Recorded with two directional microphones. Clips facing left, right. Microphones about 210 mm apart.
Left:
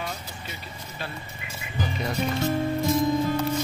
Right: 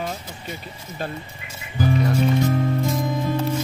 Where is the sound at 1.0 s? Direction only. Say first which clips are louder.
Right 7 dB; 45° right (ahead or behind).